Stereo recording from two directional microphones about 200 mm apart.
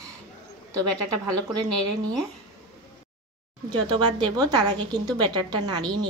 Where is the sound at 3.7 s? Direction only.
25° right (ahead or behind).